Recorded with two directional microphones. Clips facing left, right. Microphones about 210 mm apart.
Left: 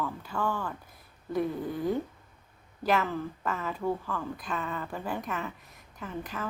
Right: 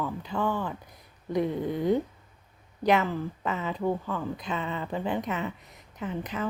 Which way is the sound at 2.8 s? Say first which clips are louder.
Right 3 dB; 15° right (ahead or behind).